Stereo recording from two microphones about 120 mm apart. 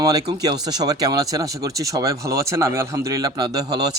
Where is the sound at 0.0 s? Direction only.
30° right (ahead or behind).